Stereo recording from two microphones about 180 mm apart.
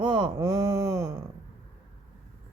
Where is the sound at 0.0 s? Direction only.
25° right (ahead or behind).